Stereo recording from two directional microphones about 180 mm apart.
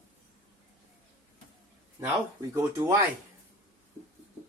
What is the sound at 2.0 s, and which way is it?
Speech, 15° right (ahead or behind).